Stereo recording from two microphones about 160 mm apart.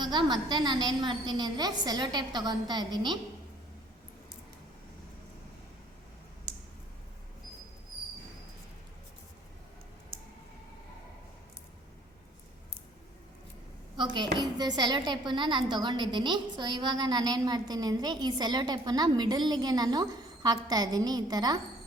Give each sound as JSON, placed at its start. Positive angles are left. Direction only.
{"t": 0.0, "sound": "a woman's voice", "side_deg": -25}
{"t": 13.9, "sound": "a woman's voice", "side_deg": -30}